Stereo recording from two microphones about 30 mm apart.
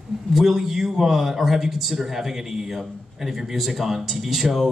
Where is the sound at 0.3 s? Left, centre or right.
Centre.